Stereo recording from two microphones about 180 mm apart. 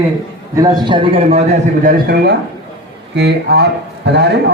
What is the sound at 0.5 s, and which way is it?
A man's voice, 20° right (ahead or behind).